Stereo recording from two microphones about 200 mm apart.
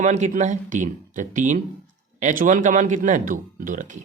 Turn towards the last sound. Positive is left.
turn(degrees=-40)  # may be behind; listen again after turning